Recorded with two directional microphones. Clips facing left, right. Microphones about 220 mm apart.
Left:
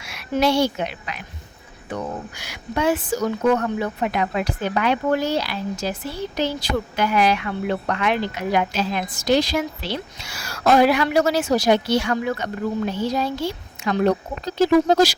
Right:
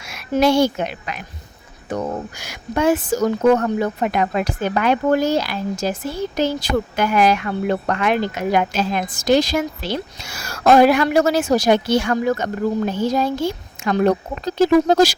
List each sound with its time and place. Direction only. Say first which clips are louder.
0.0 s a woman's voice: right 3 dB; 45° right (ahead or behind)